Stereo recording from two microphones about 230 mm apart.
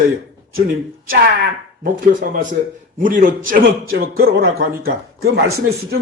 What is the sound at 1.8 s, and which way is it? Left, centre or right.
A man's voice, right.